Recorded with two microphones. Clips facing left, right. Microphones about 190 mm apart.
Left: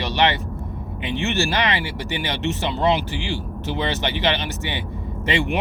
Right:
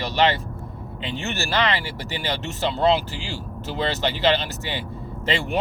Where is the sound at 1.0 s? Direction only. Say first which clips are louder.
Left 6 dB; 15° left (ahead or behind).